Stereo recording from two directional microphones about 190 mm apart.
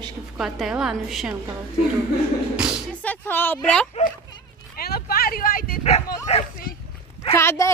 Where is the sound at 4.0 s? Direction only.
35° left (ahead or behind).